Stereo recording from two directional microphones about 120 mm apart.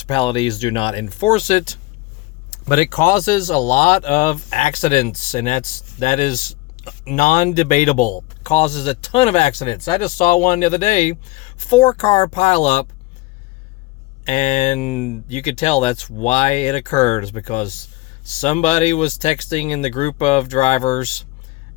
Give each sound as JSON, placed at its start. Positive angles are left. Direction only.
{"t": 0.1, "sound": "speech", "side_deg": 50}
{"t": 1.3, "sound": "speech", "side_deg": 80}
{"t": 3.2, "sound": "speech", "side_deg": 90}
{"t": 8.4, "sound": "speech", "side_deg": 65}
{"t": 9.6, "sound": "speech", "side_deg": 45}
{"t": 10.2, "sound": "speech", "side_deg": 90}
{"t": 14.3, "sound": "speech", "side_deg": 75}